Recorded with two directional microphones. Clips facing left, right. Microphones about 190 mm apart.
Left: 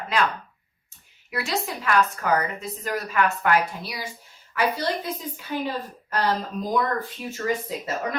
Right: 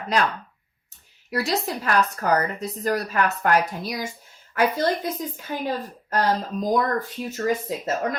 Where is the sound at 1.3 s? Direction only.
35° right (ahead or behind).